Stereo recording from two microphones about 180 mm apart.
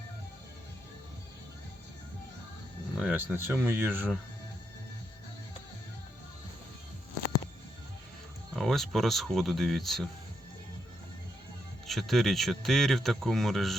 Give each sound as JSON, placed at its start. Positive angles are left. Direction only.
{"t": 2.9, "sound": "speech", "side_deg": -5}
{"t": 8.5, "sound": "speech", "side_deg": 0}
{"t": 11.9, "sound": "speech", "side_deg": 0}